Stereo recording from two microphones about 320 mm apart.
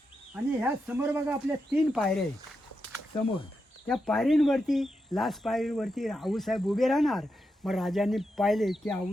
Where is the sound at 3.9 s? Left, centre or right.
Centre.